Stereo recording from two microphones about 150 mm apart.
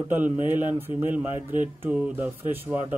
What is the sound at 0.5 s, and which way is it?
Speech, 15° right (ahead or behind).